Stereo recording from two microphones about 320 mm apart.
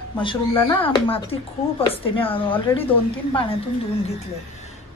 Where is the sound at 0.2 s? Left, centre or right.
Centre.